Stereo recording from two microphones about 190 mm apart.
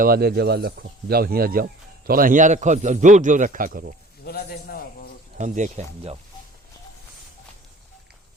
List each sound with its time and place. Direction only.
0.0 s speech: 55° right (ahead or behind)
4.3 s a man's voice: 55° left (ahead or behind)
5.4 s speech: 40° right (ahead or behind)